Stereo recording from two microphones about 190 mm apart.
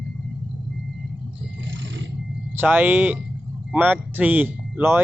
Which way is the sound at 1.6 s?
70° right (ahead or behind).